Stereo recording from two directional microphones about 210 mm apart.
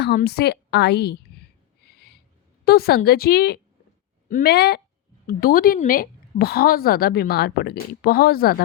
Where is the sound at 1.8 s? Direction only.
50° left (ahead or behind).